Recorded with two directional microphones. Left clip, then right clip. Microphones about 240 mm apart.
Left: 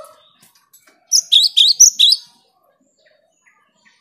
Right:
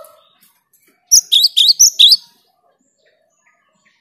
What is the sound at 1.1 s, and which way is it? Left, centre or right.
Chirp, centre.